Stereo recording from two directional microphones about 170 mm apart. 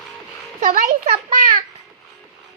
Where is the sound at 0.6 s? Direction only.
50° right (ahead or behind).